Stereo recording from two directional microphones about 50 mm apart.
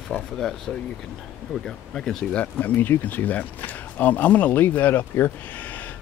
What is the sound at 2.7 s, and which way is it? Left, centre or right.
Speech, left.